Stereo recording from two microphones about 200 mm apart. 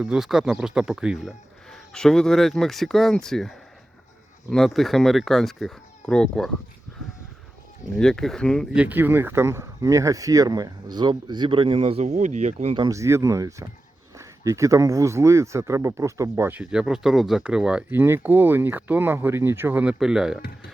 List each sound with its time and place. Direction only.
0.0 s speech: centre (ahead or behind)
7.9 s speech: 5° left (ahead or behind); by 12.7 s 35° right (ahead or behind)
12.7 s speech: 20° right (ahead or behind); by 20.4 s 5° right (ahead or behind)